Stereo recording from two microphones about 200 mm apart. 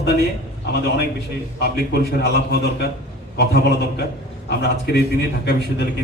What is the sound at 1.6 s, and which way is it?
A man's voice, 55° left (ahead or behind).